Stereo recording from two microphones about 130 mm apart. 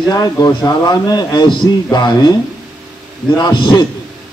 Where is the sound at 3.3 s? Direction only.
35° left (ahead or behind).